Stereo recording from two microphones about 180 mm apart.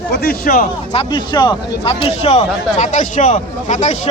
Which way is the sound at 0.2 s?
55° left (ahead or behind).